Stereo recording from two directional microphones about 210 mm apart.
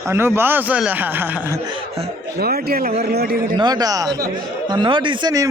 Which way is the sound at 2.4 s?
45° right (ahead or behind).